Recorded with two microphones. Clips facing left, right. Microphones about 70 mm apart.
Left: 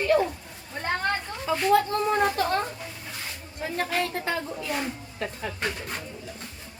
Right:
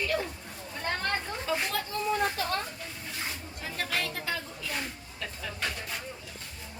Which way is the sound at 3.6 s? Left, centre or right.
Left.